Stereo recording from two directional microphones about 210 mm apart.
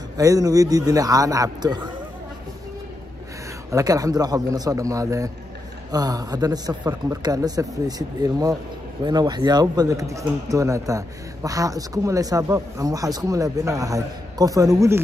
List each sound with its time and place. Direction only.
0.2 s speech: 15° right (ahead or behind)
3.7 s speech: 15° right (ahead or behind)